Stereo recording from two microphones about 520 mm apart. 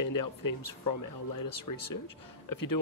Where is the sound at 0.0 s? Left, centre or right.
Left.